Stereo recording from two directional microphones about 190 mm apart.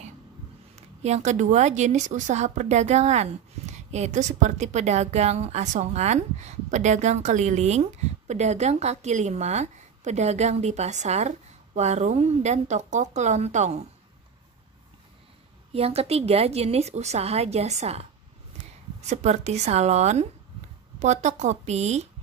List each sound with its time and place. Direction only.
1.0 s speech: 35° right (ahead or behind)
15.7 s speech: 30° right (ahead or behind)